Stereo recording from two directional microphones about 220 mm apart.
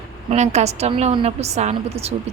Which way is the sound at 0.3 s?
30° right (ahead or behind).